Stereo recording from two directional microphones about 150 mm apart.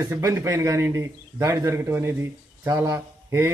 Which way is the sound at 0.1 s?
15° right (ahead or behind).